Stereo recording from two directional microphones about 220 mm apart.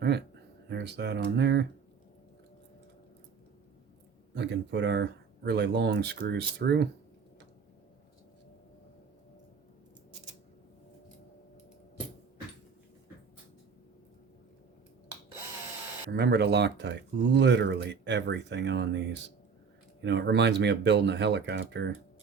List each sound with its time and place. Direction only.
0.0 s speech: 50° right (ahead or behind)
4.4 s speech: 55° right (ahead or behind)
16.1 s speech: 50° right (ahead or behind)
20.0 s speech: 50° right (ahead or behind)